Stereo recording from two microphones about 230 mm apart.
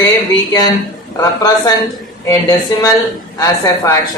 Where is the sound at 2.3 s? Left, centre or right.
Centre.